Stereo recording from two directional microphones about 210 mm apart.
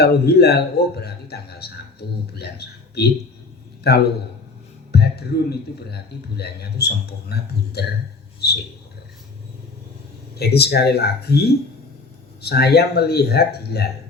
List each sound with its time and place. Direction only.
0.0 s speech: 50° left (ahead or behind)
8.4 s a sound: 50° left (ahead or behind)
10.3 s speech: 50° left (ahead or behind)